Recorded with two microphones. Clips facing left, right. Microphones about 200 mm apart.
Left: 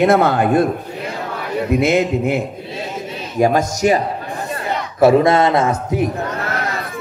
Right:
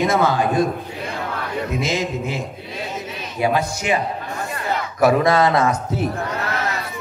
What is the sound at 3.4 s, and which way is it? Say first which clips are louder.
Speech: left 6 dB; 45° left (ahead or behind).